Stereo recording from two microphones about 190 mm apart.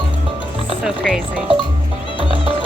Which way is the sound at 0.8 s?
5° right (ahead or behind).